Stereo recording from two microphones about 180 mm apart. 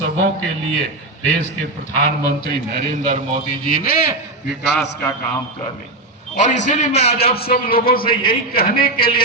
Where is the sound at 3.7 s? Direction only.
55° left (ahead or behind).